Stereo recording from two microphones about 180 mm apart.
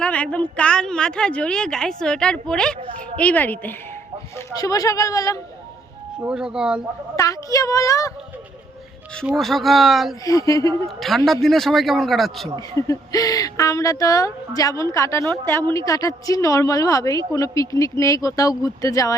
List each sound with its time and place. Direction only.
0.0 s a woman's voice: 5° left (ahead or behind)
6.2 s a woman's voice: 5° right (ahead or behind)
7.2 s a woman's voice: 20° left (ahead or behind)
9.2 s a woman's voice: centre (ahead or behind)
10.2 s a woman's voice: 20° left (ahead or behind)
10.8 s a woman's voice: centre (ahead or behind)
12.5 s a woman's voice: 20° left (ahead or behind)